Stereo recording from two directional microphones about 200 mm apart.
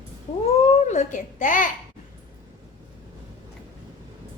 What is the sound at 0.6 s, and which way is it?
Babbling, 35° left (ahead or behind).